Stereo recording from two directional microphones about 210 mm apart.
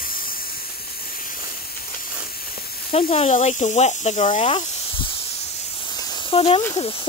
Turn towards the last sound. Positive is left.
turn(degrees=25)  # may be behind; listen again after turning